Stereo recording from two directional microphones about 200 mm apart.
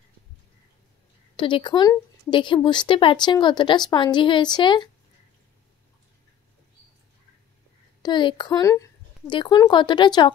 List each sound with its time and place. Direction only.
1.3 s speech: 25° left (ahead or behind)
8.0 s speech: 25° left (ahead or behind)